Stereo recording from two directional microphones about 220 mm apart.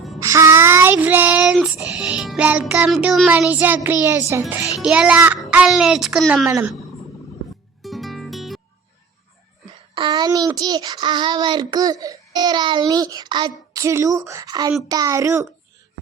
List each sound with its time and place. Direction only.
0.2 s child singing: 15° right (ahead or behind)
3.8 s a child's voice: 10° right (ahead or behind)
7.8 s music: centre (ahead or behind)
9.9 s a child's voice: 20° right (ahead or behind)